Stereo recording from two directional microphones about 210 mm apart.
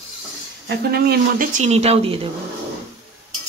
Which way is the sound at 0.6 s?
50° right (ahead or behind).